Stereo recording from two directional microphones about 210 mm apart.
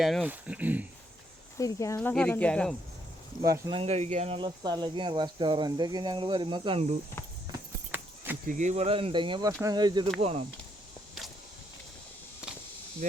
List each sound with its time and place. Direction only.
0.0 s speech: 5° right (ahead or behind)
1.5 s speech: 15° left (ahead or behind)
3.4 s speech: 20° right (ahead or behind)
7.5 s horse: 10° right (ahead or behind)
8.4 s speech: 35° right (ahead or behind)